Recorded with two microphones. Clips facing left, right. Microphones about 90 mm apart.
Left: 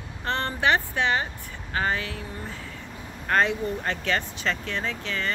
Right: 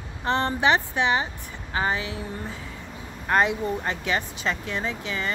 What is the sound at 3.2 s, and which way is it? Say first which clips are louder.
Speech: right 1 dB; 15° right (ahead or behind).